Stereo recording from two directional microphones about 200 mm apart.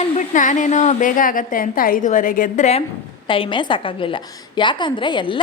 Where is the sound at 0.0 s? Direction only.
40° left (ahead or behind).